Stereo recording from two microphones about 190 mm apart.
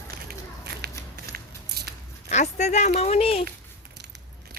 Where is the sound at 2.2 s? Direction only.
40° left (ahead or behind).